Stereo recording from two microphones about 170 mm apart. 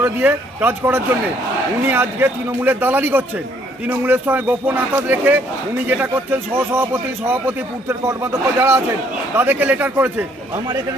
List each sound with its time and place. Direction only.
0.0 s a man's voice: 10° right (ahead or behind)